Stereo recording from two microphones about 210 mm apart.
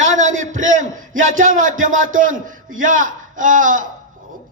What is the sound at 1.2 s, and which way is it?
A man's voice, 35° right (ahead or behind).